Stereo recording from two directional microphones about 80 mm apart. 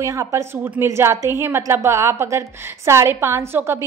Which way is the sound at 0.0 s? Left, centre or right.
Right.